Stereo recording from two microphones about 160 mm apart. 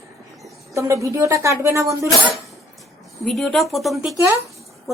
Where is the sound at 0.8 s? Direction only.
20° right (ahead or behind).